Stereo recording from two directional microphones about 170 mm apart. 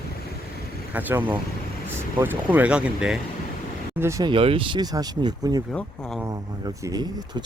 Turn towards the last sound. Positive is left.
turn(degrees=-25)  # may be behind; listen again after turning